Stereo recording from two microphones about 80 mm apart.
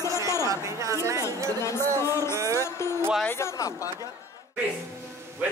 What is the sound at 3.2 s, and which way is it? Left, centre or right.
Speech, left.